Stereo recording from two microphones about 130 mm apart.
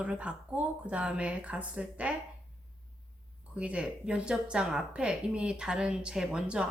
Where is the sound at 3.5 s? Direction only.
10° right (ahead or behind).